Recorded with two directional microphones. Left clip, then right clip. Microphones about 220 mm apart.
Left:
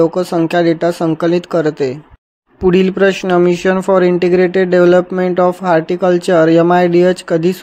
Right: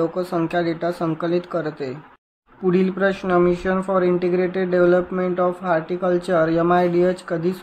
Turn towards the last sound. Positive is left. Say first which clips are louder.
# left 8 dB
turn(degrees=35)  # may be behind; listen again after turning